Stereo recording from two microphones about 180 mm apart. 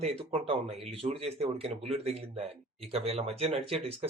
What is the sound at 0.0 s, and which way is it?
Speech, 30° right (ahead or behind).